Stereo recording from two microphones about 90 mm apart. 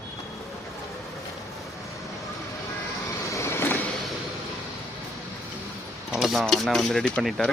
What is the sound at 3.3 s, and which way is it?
Vehicle, 30° left (ahead or behind).